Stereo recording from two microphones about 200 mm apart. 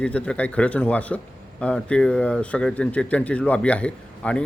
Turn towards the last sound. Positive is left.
turn(degrees=5)  # may be behind; listen again after turning